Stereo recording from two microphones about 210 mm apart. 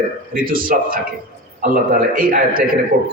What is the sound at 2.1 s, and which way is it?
Speech, 40° right (ahead or behind).